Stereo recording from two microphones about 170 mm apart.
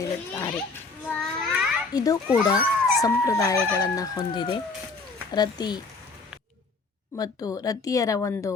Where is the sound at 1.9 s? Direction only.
20° left (ahead or behind).